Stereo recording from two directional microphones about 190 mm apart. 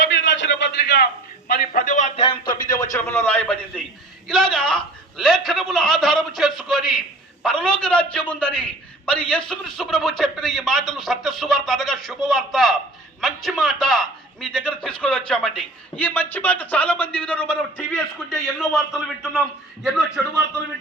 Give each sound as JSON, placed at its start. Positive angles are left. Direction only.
{"t": 0.1, "sound": "a sound", "side_deg": 70}
{"t": 1.5, "sound": "a man's voice", "side_deg": 50}
{"t": 2.9, "sound": "a man's voice", "side_deg": 10}